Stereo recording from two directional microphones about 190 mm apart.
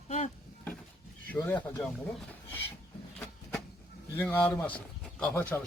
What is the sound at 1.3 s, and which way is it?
Speech, 10° left (ahead or behind).